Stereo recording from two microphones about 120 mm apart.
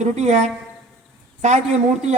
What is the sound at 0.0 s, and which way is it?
Speech, 70° right (ahead or behind).